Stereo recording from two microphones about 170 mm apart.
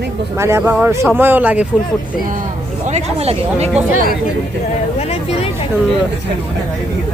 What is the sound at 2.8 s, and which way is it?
Speech, 40° right (ahead or behind).